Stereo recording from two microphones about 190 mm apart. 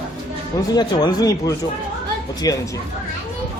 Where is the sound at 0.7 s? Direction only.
20° left (ahead or behind).